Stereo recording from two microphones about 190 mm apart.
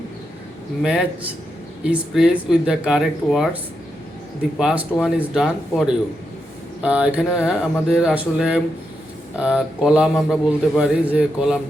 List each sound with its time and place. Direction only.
0.8 s speech: 5° right (ahead or behind)
4.5 s speech: 5° right (ahead or behind)